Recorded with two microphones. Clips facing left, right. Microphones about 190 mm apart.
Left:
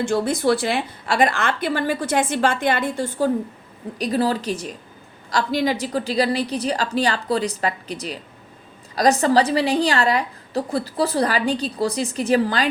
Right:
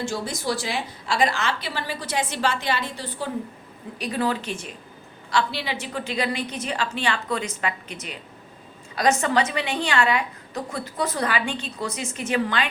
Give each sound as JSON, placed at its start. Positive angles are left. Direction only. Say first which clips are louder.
{"t": 0.0, "sound": "a woman's voice", "louder": "left 8 dB", "side_deg": 55}